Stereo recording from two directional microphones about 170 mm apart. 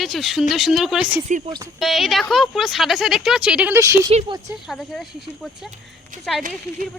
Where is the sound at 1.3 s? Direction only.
45° right (ahead or behind).